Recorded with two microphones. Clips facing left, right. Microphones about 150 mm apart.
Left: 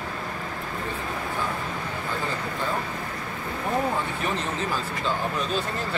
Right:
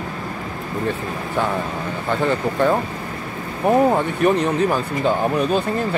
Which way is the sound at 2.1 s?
65° right (ahead or behind).